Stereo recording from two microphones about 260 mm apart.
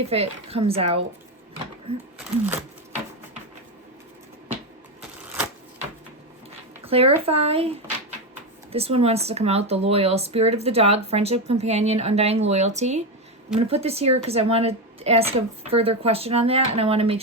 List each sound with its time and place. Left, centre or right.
0.0 s speech: right
2.1 s speech: centre
6.8 s speech: right